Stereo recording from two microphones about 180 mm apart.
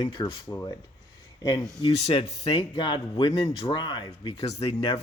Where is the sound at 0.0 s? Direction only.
25° left (ahead or behind).